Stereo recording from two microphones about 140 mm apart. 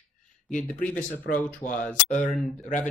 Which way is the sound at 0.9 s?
10° left (ahead or behind).